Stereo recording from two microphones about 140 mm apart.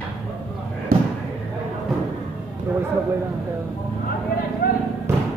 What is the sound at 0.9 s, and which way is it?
Slam, 90° right.